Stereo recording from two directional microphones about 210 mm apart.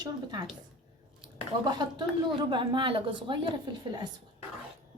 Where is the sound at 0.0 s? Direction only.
20° right (ahead or behind).